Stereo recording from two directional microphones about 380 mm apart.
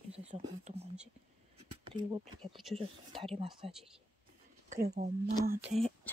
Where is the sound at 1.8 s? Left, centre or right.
Centre.